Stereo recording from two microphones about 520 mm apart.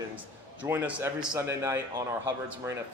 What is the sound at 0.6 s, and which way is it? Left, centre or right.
Speech, centre.